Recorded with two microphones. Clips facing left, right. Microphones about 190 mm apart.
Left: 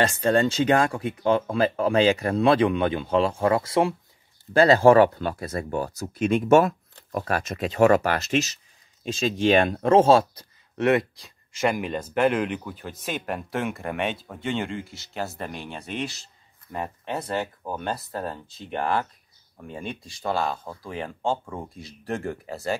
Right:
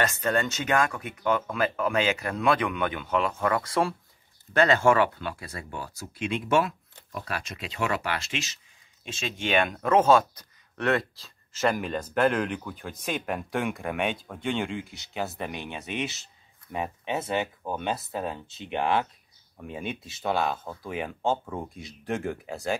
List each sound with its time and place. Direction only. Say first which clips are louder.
0.0 s speech: left 5 dB; 30° left (ahead or behind); by 22.8 s centre (ahead or behind)